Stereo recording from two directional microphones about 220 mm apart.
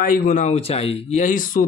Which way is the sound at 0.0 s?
40° left (ahead or behind).